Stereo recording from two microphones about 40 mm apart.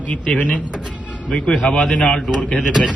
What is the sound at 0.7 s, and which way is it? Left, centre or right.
Speech, right.